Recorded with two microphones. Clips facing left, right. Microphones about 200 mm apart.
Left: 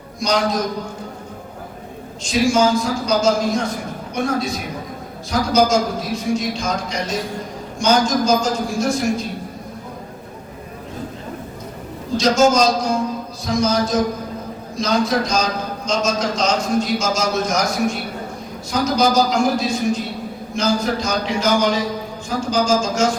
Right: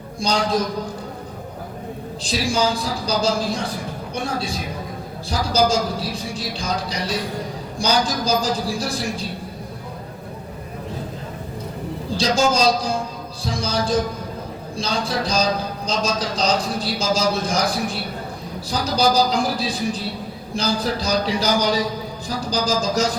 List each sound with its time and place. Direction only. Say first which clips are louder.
0.2 s a man's voice: left 3 dB; 30° right (ahead or behind)
2.2 s a man's voice: left 5 dB; 35° right (ahead or behind)
12.1 s a man's voice: left 5 dB; 30° right (ahead or behind)